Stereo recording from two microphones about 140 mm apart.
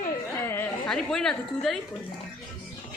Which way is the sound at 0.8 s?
5° left (ahead or behind).